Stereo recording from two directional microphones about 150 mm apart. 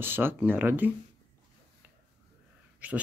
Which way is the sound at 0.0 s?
15° right (ahead or behind).